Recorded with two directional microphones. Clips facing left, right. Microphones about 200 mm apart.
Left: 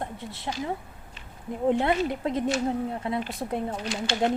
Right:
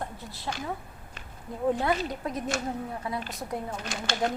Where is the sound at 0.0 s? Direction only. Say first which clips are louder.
Left 2 dB; 25° left (ahead or behind).